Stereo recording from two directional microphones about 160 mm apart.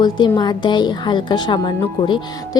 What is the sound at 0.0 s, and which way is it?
A woman's voice, 25° left (ahead or behind).